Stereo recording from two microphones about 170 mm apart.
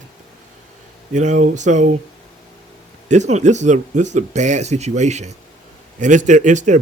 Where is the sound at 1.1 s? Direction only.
45° right (ahead or behind).